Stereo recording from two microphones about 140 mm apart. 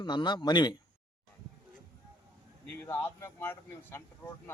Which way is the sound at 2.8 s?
15° left (ahead or behind).